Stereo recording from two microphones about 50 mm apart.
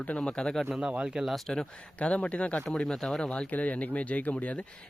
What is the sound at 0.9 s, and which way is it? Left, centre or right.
Speech, centre.